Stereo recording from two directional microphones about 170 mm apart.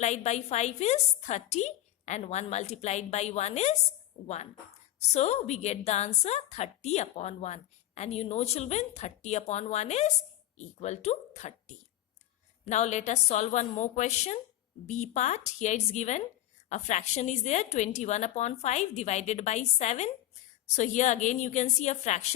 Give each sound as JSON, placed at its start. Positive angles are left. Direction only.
{"t": 0.0, "sound": "a woman's voice", "side_deg": 40}
{"t": 4.9, "sound": "a woman's voice", "side_deg": 40}